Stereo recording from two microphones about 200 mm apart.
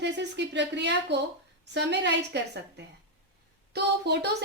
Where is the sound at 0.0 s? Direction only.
60° right (ahead or behind).